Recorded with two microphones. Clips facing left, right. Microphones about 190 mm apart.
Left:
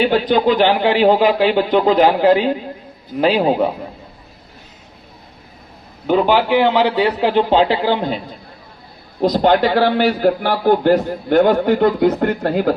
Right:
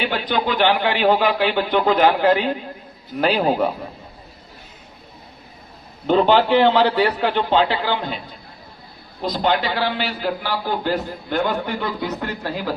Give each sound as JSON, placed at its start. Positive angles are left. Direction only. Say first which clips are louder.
{"t": 0.0, "sound": "a man's voice", "louder": "left 8 dB", "side_deg": 40}
{"t": 6.1, "sound": "a man's voice", "louder": "left 1 dB", "side_deg": 10}
{"t": 7.2, "sound": "a man's voice", "louder": "left 4 dB", "side_deg": 30}
{"t": 9.2, "sound": "a man's voice", "louder": "left 7 dB", "side_deg": 45}